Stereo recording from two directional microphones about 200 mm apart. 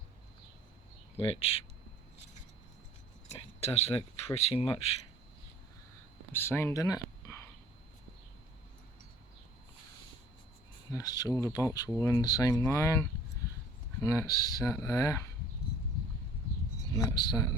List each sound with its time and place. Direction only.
1.3 s speech: 30° left (ahead or behind)
3.2 s a sound: 30° left (ahead or behind)
4.4 s speech: 30° left (ahead or behind)
6.3 s speech: 10° left (ahead or behind)
10.9 s speech: 20° left (ahead or behind)
16.9 s speech: 20° left (ahead or behind)